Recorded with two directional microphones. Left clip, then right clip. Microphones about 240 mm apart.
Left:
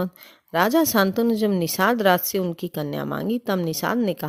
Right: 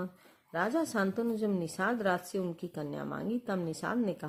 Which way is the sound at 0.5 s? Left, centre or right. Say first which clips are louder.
Left 12 dB; left.